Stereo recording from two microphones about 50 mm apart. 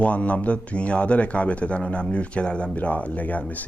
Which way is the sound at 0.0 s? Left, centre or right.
Left.